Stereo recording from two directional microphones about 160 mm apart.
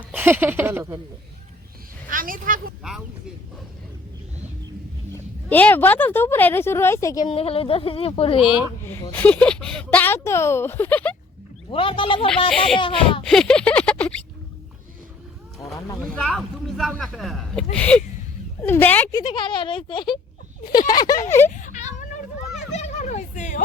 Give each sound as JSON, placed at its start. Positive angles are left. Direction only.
{"t": 0.1, "sound": "speech", "side_deg": -10}
{"t": 2.0, "sound": "speech", "side_deg": -60}
{"t": 5.5, "sound": "speech", "side_deg": 10}
{"t": 7.3, "sound": "speech", "side_deg": 35}
{"t": 8.8, "sound": "speech", "side_deg": 15}
{"t": 11.7, "sound": "speech", "side_deg": 35}
{"t": 12.5, "sound": "speech", "side_deg": 5}
{"t": 13.2, "sound": "a sound", "side_deg": 5}
{"t": 16.0, "sound": "speech", "side_deg": 5}
{"t": 19.1, "sound": "speech", "side_deg": 30}
{"t": 21.5, "sound": "a sound", "side_deg": 50}